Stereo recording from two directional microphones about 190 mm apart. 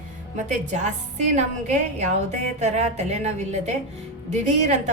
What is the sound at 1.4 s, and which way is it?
A woman's voice, 40° right (ahead or behind).